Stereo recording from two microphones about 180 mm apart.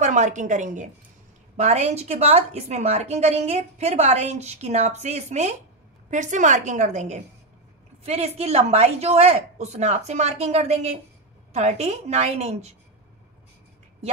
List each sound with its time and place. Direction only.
0.0 s a woman's voice: 40° right (ahead or behind)